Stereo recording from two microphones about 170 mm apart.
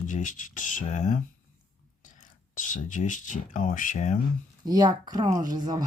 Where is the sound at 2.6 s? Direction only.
50° left (ahead or behind).